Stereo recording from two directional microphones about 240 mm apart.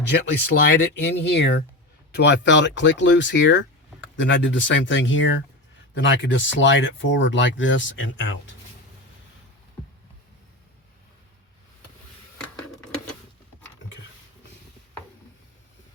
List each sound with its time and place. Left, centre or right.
0.1 s speech: left